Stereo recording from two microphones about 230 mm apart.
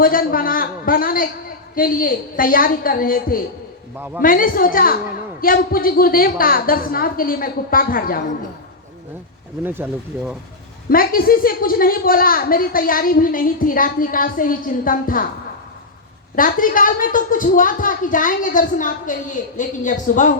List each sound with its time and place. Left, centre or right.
0.0 s a woman's voice: left
3.9 s speech: centre
4.2 s a woman's voice: left
9.6 s speech: centre
10.8 s a woman's voice: left
16.3 s a woman's voice: left